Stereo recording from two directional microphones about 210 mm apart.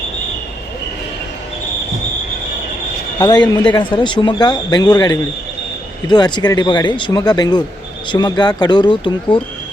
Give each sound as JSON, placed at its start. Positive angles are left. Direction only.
{"t": 3.2, "sound": "speech", "side_deg": 20}